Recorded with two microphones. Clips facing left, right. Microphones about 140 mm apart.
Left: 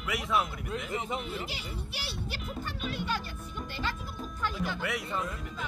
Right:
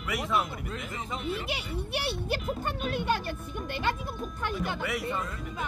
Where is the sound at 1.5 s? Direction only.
60° right (ahead or behind).